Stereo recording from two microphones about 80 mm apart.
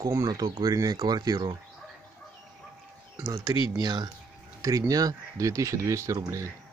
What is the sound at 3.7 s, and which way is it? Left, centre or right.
Speech, right.